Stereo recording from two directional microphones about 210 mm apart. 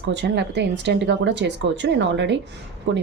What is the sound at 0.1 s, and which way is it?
Speech, 55° right (ahead or behind).